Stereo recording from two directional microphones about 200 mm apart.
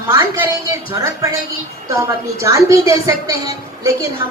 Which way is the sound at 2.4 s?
15° right (ahead or behind).